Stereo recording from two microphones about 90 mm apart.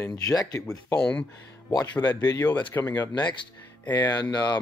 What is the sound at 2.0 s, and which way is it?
Speech, 50° left (ahead or behind).